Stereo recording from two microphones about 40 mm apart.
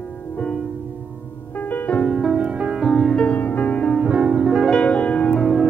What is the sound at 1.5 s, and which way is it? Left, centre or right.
Music, left.